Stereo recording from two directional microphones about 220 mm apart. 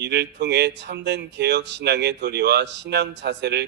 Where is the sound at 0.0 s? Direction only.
50° right (ahead or behind).